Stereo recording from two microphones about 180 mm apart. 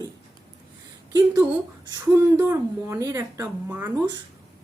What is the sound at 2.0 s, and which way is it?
Speech, 15° right (ahead or behind).